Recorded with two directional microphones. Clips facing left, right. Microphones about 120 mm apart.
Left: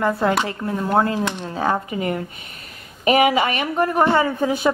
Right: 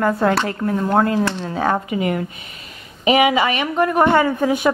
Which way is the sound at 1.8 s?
35° left (ahead or behind).